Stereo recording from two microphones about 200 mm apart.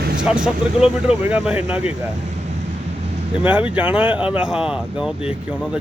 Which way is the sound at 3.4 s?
5° right (ahead or behind).